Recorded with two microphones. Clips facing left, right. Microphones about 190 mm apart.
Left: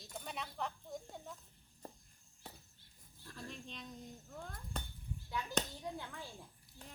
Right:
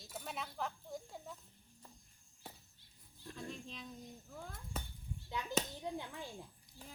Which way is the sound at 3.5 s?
Centre (ahead or behind).